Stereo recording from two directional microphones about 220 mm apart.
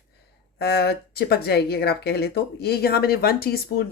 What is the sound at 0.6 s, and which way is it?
Speech, 45° left (ahead or behind).